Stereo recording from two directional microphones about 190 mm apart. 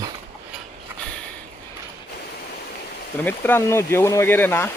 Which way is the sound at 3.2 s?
10° left (ahead or behind).